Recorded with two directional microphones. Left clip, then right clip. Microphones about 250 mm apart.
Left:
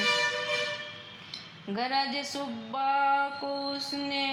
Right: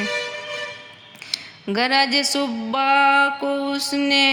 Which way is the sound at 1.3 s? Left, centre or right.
Right.